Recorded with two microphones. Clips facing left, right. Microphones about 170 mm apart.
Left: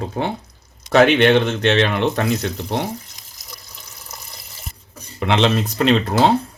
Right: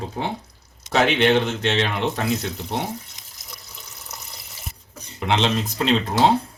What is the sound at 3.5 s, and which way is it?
Water, centre (ahead or behind).